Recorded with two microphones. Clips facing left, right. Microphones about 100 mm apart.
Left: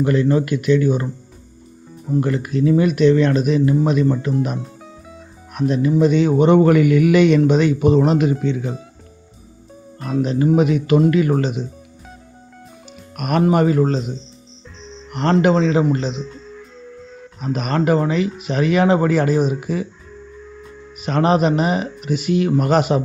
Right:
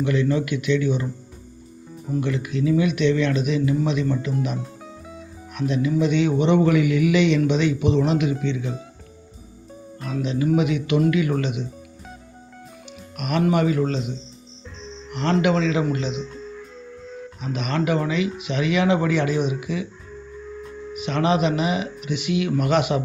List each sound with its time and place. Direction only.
0.0 s a man's voice: 40° left (ahead or behind)
2.2 s a man's voice: 45° left (ahead or behind)
5.5 s a man's voice: 40° left (ahead or behind)
10.2 s speech: 45° left (ahead or behind)
13.1 s speech: 50° left (ahead or behind)
16.1 s music: centre (ahead or behind)
17.4 s speech: 45° left (ahead or behind)
20.1 s tuning fork: centre (ahead or behind)
21.0 s speech: 40° left (ahead or behind)